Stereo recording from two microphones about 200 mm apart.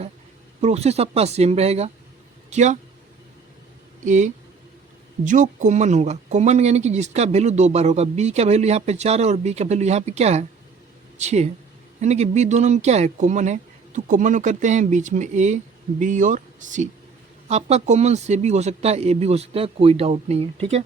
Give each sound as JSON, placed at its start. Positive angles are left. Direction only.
{"t": 0.6, "sound": "speech", "side_deg": -30}
{"t": 4.0, "sound": "speech", "side_deg": -40}